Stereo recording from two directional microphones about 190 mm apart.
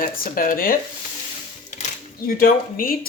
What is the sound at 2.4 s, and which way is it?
Speech, 50° left (ahead or behind).